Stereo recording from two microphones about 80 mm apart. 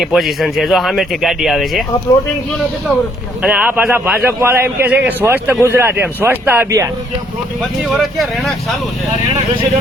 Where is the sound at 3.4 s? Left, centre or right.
Centre.